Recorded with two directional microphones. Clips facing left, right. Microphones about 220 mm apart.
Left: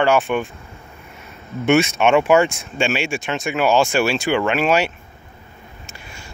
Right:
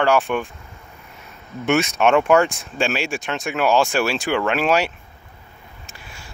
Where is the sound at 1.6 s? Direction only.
Centre (ahead or behind).